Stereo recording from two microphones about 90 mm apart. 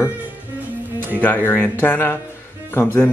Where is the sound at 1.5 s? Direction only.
25° left (ahead or behind).